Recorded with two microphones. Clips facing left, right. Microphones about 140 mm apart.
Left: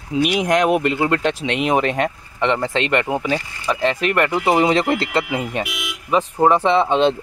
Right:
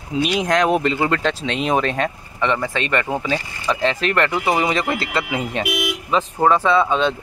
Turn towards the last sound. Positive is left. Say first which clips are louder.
# left 2 dB
turn(degrees=25)  # may be behind; listen again after turning